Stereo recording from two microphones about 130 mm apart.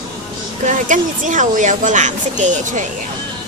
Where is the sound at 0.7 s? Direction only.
75° right (ahead or behind).